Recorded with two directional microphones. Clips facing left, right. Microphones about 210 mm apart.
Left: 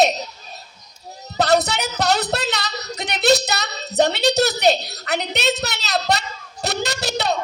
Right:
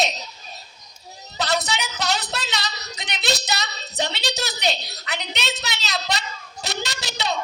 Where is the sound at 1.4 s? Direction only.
60° left (ahead or behind).